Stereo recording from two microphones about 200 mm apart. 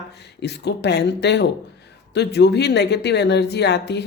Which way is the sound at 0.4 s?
55° left (ahead or behind).